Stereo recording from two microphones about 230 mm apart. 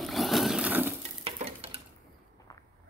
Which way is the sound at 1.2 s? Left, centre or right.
Right.